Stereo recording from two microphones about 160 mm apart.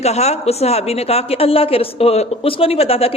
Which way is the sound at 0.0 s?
40° left (ahead or behind).